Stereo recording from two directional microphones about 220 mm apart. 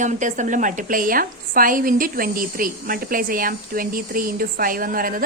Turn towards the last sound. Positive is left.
turn(degrees=-40)  # may be behind; listen again after turning